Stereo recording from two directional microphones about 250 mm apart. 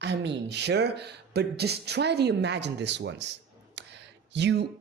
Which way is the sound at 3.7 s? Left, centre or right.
Right.